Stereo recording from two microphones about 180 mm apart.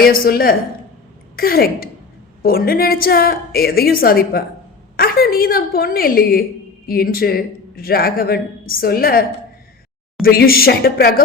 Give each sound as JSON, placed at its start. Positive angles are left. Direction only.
{"t": 0.0, "sound": "a man's voice", "side_deg": 55}
{"t": 10.2, "sound": "a man's voice", "side_deg": 55}